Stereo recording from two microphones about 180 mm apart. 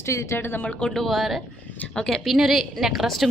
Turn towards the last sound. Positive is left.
turn(degrees=0)  # may be behind; listen again after turning